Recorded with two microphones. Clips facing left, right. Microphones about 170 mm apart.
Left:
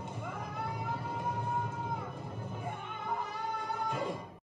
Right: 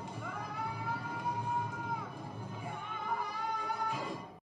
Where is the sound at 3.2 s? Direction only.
10° right (ahead or behind).